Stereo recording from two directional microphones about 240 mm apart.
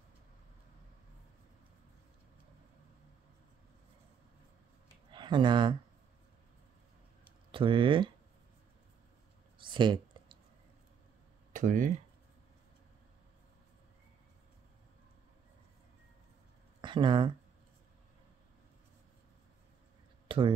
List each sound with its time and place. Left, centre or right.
5.1 s speech: centre
7.5 s speech: right
9.6 s a sound: centre
11.5 s speech: right
16.8 s speech: centre
20.2 s a sound: right